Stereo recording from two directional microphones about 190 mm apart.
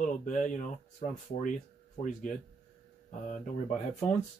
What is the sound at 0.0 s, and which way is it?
Speech, 45° left (ahead or behind).